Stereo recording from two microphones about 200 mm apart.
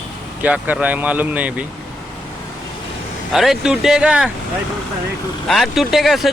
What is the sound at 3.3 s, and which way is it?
Speech, centre (ahead or behind).